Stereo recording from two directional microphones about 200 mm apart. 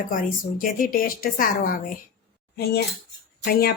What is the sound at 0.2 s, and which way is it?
A woman's voice, 45° left (ahead or behind).